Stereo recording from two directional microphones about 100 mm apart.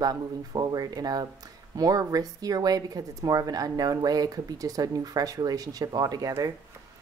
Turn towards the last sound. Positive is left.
turn(degrees=-40)  # may be behind; listen again after turning